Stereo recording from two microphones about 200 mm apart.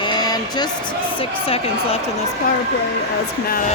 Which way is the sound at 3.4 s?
45° left (ahead or behind).